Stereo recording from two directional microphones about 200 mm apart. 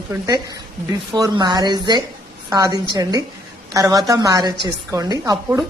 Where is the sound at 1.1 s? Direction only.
20° right (ahead or behind).